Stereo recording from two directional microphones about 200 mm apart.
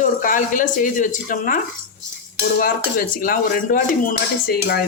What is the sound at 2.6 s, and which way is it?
Speech, 45° left (ahead or behind).